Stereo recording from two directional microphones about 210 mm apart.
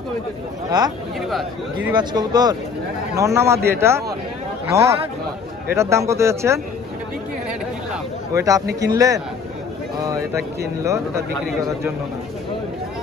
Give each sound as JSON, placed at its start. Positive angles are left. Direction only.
{"t": 0.7, "sound": "a man's voice", "side_deg": -20}
{"t": 8.4, "sound": "a man's voice", "side_deg": -15}
{"t": 10.8, "sound": "a man's voice", "side_deg": -15}